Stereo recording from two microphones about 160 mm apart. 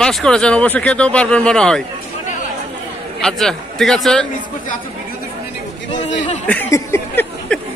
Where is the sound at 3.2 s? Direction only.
5° left (ahead or behind).